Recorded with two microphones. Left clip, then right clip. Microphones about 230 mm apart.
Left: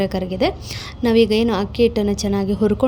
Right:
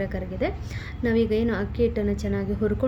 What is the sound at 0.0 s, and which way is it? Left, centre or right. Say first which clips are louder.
A woman's voice: left 8 dB; left.